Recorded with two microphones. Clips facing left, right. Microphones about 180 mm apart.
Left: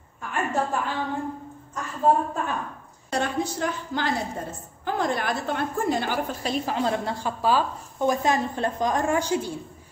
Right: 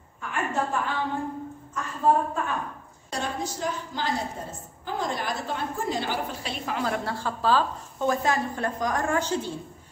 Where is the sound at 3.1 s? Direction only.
60° left (ahead or behind); by 9.5 s 10° left (ahead or behind).